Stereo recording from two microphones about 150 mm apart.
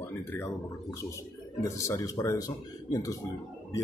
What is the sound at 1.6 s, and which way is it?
Speech, 20° left (ahead or behind).